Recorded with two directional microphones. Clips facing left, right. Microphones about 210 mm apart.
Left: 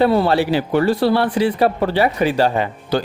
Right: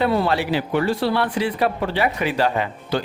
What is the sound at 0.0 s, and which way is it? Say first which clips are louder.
A man's voice: left 5 dB; 35° left (ahead or behind).